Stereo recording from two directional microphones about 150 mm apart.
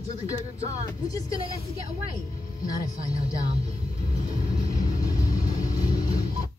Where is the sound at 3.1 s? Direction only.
45° right (ahead or behind).